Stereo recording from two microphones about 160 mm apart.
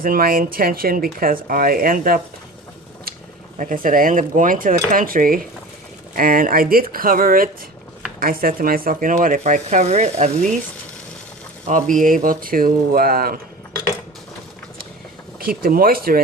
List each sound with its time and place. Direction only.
0.0 s speech: 65° right (ahead or behind)
3.6 s speech: 55° right (ahead or behind)
11.6 s speech: 55° right (ahead or behind)
15.4 s speech: 65° right (ahead or behind)